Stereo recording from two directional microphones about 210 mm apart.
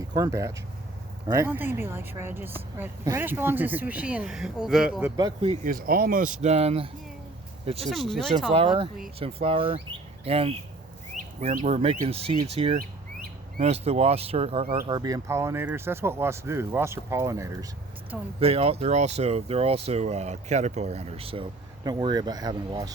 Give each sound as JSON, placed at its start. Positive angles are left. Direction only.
{"t": 0.1, "sound": "speech", "side_deg": -15}
{"t": 5.1, "sound": "speech", "side_deg": -20}
{"t": 5.6, "sound": "speech", "side_deg": -40}
{"t": 6.4, "sound": "speech", "side_deg": -30}
{"t": 7.9, "sound": "speech", "side_deg": 0}
{"t": 8.5, "sound": "speech", "side_deg": -25}
{"t": 18.3, "sound": "speech", "side_deg": -25}